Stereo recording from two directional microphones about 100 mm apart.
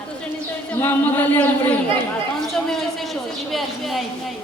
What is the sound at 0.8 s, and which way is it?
Speech, 20° left (ahead or behind).